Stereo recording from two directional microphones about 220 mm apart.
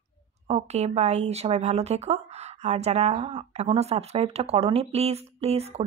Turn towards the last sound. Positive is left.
turn(degrees=-30)  # may be behind; listen again after turning